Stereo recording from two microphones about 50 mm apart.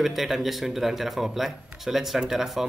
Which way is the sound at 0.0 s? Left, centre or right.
Centre.